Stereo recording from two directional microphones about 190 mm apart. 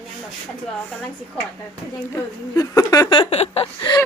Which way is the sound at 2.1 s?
20° left (ahead or behind).